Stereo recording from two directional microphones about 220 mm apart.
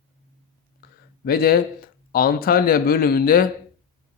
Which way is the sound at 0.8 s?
45° left (ahead or behind).